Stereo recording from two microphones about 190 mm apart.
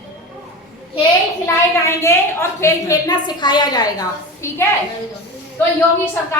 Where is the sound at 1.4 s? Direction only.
15° left (ahead or behind).